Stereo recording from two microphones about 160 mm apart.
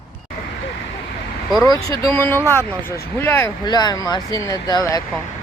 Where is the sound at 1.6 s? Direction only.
25° left (ahead or behind).